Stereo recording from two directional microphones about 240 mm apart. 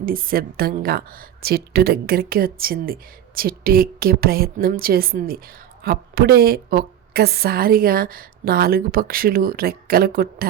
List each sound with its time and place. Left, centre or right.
0.0 s a woman's voice: right